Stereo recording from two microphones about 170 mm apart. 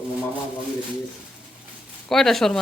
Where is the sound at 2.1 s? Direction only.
Centre (ahead or behind).